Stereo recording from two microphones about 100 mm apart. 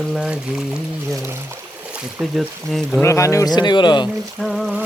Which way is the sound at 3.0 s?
30° left (ahead or behind).